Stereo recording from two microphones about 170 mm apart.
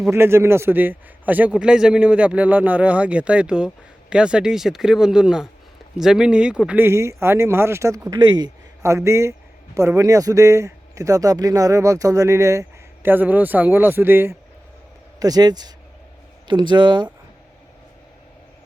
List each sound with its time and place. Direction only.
0.1 s speech: 15° right (ahead or behind)